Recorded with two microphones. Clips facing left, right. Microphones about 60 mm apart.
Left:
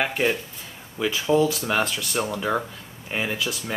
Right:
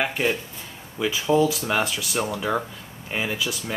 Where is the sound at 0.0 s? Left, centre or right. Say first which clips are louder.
Left 1 dB; centre.